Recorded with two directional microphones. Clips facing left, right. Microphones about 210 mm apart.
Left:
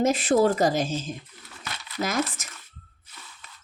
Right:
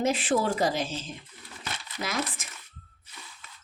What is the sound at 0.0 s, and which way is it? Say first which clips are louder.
Speech: left 5 dB; 40° left (ahead or behind).